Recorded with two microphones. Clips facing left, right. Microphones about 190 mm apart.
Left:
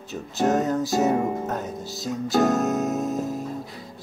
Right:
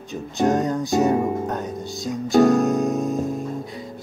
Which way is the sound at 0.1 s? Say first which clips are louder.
Right 2 dB; 5° left (ahead or behind).